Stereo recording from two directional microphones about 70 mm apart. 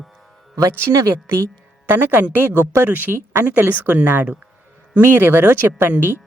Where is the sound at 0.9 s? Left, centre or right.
Right.